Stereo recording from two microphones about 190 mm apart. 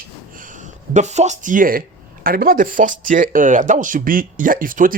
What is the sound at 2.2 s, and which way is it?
Speech, 50° right (ahead or behind).